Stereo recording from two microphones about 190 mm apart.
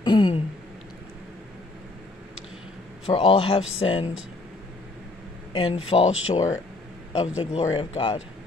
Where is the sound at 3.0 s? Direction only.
30° left (ahead or behind).